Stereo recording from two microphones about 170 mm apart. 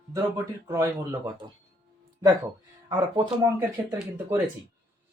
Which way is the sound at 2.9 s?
30° right (ahead or behind).